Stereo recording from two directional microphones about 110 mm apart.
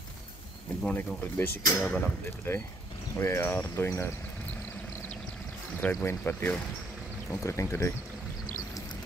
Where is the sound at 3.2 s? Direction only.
25° left (ahead or behind).